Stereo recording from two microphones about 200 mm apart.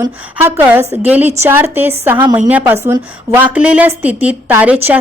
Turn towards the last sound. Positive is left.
turn(degrees=-10)  # may be behind; listen again after turning